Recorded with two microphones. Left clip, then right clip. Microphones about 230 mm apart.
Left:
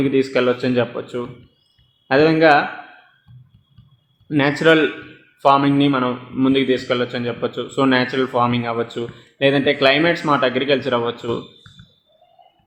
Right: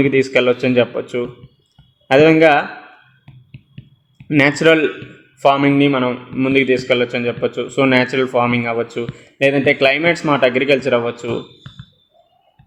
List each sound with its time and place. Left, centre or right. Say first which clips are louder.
0.0 s a man's voice: right 3 dB; right
4.3 s a man's voice: right 3 dB; right